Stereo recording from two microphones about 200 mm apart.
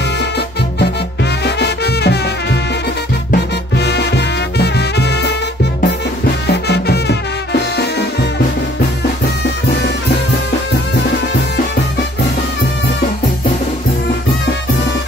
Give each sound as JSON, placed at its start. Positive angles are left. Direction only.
{"t": 1.4, "sound": "music", "side_deg": 55}